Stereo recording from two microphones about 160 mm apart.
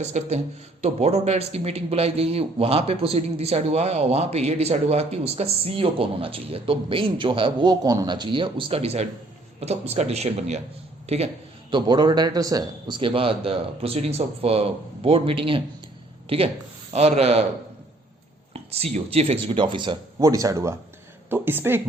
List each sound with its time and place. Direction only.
0.0 s speech: 45° right (ahead or behind)
11.7 s speech: 25° right (ahead or behind)
18.5 s speech: 40° right (ahead or behind); by 21.8 s 15° right (ahead or behind)